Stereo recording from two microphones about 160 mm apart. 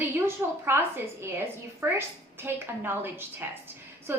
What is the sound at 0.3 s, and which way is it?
A woman's voice, 15° right (ahead or behind).